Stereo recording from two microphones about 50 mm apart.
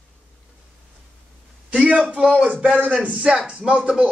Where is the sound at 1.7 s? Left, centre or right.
Right.